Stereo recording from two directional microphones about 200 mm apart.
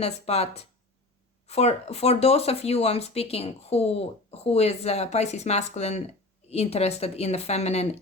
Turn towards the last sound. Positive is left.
turn(degrees=30)  # may be behind; listen again after turning